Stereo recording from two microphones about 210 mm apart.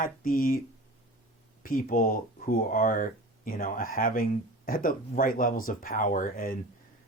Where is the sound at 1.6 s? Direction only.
40° left (ahead or behind).